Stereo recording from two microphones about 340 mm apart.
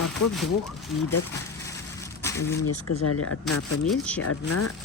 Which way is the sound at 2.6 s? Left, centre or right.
Left.